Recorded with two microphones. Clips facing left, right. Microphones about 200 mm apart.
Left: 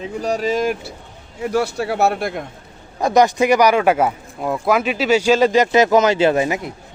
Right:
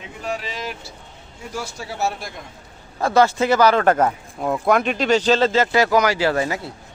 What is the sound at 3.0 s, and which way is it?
Speech, 15° left (ahead or behind).